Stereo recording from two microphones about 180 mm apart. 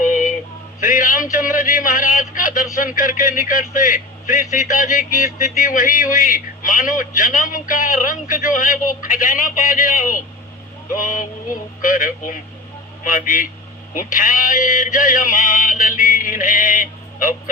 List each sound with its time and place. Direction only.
0.0 s male singing: 45° left (ahead or behind)
0.8 s a man's voice: 45° left (ahead or behind)
11.8 s a man's voice: 45° left (ahead or behind)